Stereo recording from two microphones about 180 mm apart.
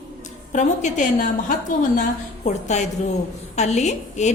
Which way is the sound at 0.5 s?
40° left (ahead or behind).